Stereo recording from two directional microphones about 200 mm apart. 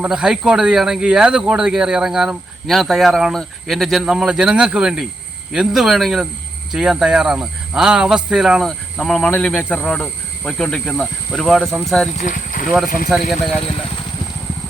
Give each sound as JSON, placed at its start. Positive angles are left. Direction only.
{"t": 0.0, "sound": "speech", "side_deg": -5}
{"t": 12.1, "sound": "speech", "side_deg": 40}
{"t": 12.6, "sound": "speech", "side_deg": 0}